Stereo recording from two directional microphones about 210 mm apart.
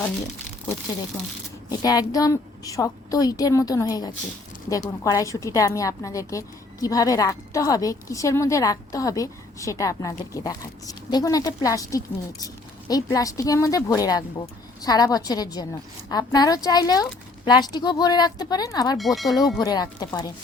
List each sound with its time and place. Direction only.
1.8 s a woman's voice: 20° left (ahead or behind)
18.9 s speech: centre (ahead or behind)
19.5 s a woman's voice: 20° left (ahead or behind)